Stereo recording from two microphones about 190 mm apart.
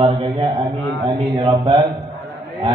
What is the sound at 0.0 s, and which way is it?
A man's voice, 25° right (ahead or behind).